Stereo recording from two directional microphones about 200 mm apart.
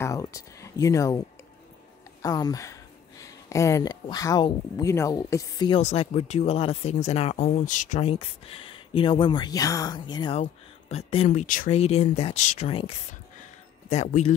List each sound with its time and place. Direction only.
0.0 s speech: 15° left (ahead or behind)
2.2 s speech: 15° left (ahead or behind)
5.8 s speech: 35° left (ahead or behind)